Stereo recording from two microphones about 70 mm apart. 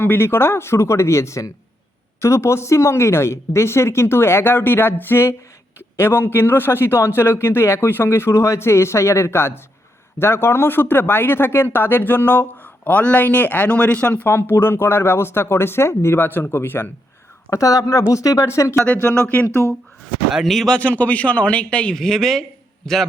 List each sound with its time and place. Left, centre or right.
0.0 s speech: left
17.5 s speech: left
18.4 s speech: left
19.1 s speech: left
20.3 s speech: centre
20.7 s a man's voice: centre